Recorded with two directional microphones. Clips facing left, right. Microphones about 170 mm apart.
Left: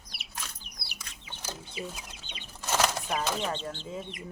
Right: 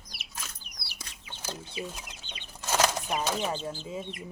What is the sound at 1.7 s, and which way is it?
Chicken, 10° left (ahead or behind).